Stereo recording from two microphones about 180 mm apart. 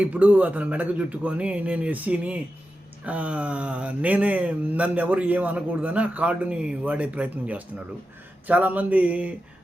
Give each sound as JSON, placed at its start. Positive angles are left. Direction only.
{"t": 0.0, "sound": "speech", "side_deg": -10}